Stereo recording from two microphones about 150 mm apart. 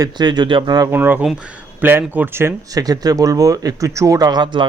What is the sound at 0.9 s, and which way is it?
Speech, 10° right (ahead or behind).